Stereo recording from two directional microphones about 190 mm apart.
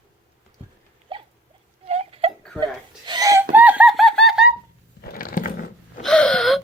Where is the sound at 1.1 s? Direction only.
25° right (ahead or behind).